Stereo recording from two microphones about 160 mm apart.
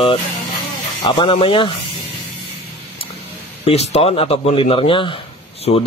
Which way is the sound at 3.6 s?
40° left (ahead or behind).